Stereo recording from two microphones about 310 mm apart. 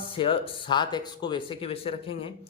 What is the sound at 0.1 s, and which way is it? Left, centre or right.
Speech, centre.